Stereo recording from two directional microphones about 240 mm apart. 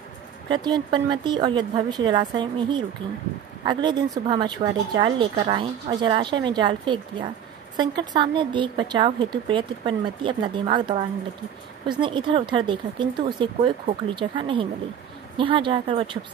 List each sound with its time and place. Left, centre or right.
0.5 s a woman's voice: centre